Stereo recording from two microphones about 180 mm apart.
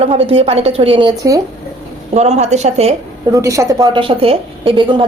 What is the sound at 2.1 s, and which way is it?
Speech, 40° right (ahead or behind).